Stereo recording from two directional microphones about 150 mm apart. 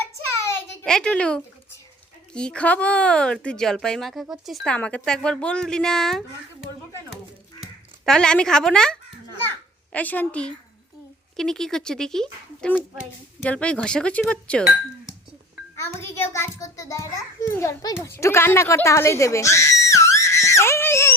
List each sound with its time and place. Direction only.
0.3 s a sound: 15° left (ahead or behind)
0.9 s speech: 5° left (ahead or behind)
9.4 s babbling: 10° left (ahead or behind)
11.3 s speech: 5° left (ahead or behind)
12.7 s a child's voice: 5° right (ahead or behind)
13.4 s speech: 10° left (ahead or behind)
15.9 s a child's voice: 15° left (ahead or behind)